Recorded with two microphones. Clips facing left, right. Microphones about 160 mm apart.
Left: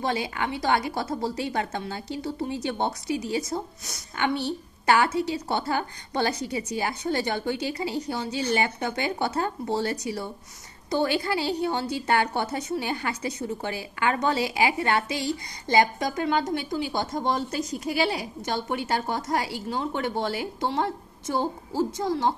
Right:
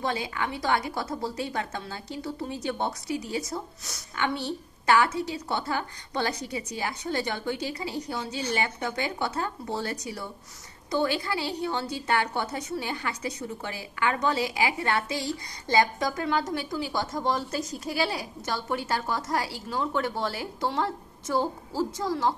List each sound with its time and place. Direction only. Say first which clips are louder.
0.0 s a woman's voice: left 2 dB; 30° left (ahead or behind)
3.1 s speech: left 3 dB; 90° left
3.3 s a woman's voice: left 3 dB; 20° left (ahead or behind)